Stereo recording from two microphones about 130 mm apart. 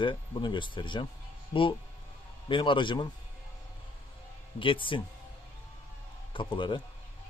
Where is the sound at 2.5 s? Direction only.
40° left (ahead or behind).